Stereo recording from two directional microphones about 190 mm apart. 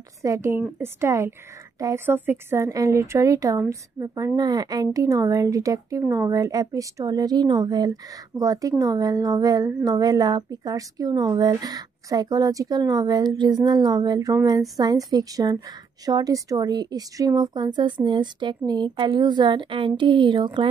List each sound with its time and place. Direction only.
0.2 s a woman's voice: 15° right (ahead or behind)